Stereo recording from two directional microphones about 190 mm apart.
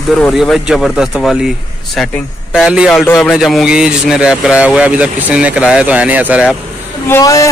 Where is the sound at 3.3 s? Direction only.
Centre (ahead or behind).